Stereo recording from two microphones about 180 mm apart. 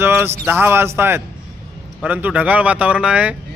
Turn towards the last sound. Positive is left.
turn(degrees=-5)  # may be behind; listen again after turning